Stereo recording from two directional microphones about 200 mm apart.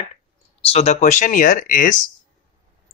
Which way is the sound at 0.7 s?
30° left (ahead or behind).